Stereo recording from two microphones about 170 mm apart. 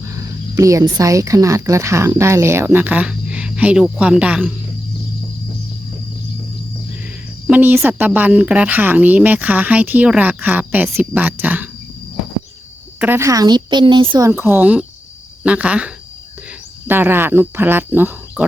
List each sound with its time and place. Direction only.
0.0 s speech: 20° right (ahead or behind)
7.4 s speech: 10° right (ahead or behind)
13.0 s a woman's voice: 15° right (ahead or behind)
14.3 s speech: 15° right (ahead or behind)